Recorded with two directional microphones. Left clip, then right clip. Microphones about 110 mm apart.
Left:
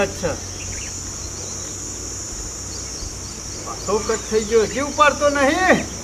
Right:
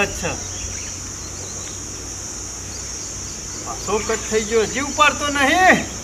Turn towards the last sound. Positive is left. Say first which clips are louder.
# right 1 dB
turn(degrees=-10)  # may be behind; listen again after turning